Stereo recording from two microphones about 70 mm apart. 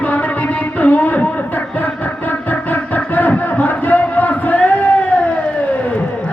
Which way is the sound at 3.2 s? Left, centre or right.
Left.